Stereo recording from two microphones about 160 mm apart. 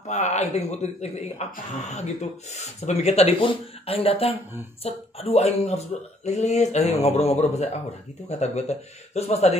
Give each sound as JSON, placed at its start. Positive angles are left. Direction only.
{"t": 0.0, "sound": "speech", "side_deg": 45}